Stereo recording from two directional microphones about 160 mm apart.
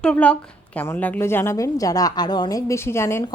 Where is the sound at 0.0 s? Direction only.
5° left (ahead or behind).